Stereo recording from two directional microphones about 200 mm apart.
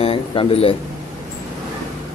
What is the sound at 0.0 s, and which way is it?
Speech, 30° left (ahead or behind).